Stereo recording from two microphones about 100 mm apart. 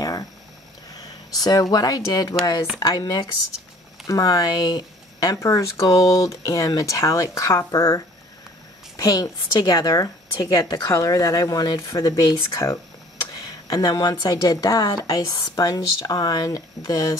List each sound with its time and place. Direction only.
0.0 s a sound: 40° left (ahead or behind)
0.9 s speech: 40° left (ahead or behind)
5.9 s speech: 45° left (ahead or behind)